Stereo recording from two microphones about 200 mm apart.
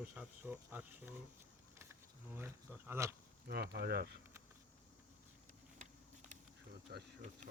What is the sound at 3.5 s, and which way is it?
Speech, 55° right (ahead or behind).